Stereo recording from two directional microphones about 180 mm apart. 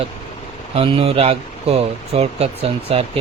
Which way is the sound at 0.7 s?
30° right (ahead or behind).